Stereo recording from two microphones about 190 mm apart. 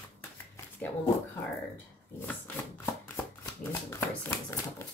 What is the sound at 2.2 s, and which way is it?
A woman's voice, 10° left (ahead or behind).